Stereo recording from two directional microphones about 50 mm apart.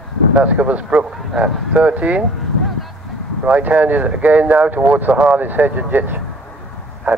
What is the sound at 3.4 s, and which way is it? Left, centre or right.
Speech, right.